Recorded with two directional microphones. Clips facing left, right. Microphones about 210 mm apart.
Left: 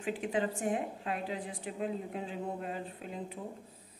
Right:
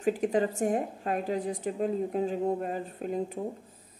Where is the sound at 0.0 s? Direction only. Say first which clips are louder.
Right 7 dB; 40° right (ahead or behind).